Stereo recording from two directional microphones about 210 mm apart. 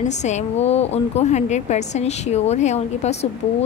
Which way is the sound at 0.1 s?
35° left (ahead or behind).